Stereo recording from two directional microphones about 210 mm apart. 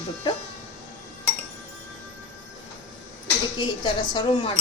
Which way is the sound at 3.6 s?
20° left (ahead or behind).